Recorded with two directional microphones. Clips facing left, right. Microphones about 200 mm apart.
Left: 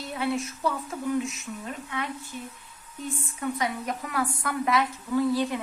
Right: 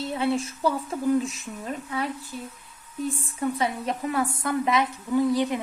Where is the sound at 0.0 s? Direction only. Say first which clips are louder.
Right 3 dB; 25° right (ahead or behind).